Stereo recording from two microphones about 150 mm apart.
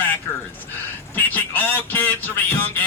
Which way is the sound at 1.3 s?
10° left (ahead or behind).